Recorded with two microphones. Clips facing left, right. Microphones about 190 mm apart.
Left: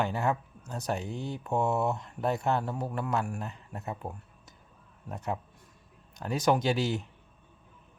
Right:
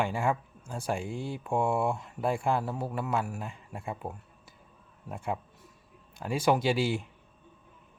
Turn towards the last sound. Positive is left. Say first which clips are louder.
# right 1 dB
turn(degrees=-10)  # may be behind; listen again after turning